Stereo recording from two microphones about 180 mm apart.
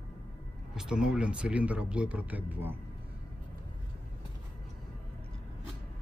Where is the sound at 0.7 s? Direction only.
5° right (ahead or behind).